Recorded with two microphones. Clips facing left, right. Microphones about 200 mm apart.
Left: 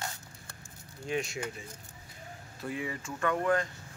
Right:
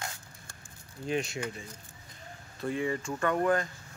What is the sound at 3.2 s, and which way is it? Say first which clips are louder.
Speech: right 1 dB; 35° right (ahead or behind).